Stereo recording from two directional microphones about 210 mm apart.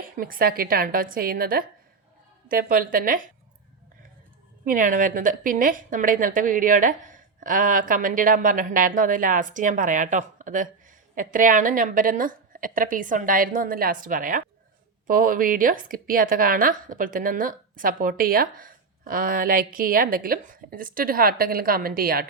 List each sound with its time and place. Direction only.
0.0 s a woman's voice: 45° right (ahead or behind)
4.6 s a woman's voice: 40° right (ahead or behind)